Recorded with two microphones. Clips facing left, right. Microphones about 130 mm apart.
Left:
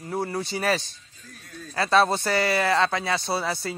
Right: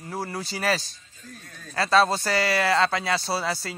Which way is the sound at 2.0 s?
Centre (ahead or behind).